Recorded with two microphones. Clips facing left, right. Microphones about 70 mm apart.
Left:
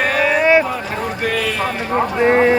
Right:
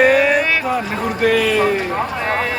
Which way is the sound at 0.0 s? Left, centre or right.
Centre.